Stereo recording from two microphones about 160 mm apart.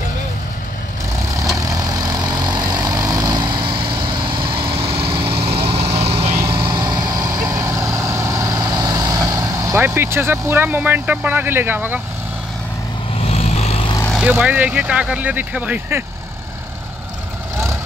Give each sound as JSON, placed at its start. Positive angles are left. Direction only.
{"t": 1.6, "sound": "vehicle", "side_deg": -25}
{"t": 6.5, "sound": "vehicle", "side_deg": -25}
{"t": 13.2, "sound": "vehicle", "side_deg": 40}
{"t": 14.2, "sound": "speech", "side_deg": -10}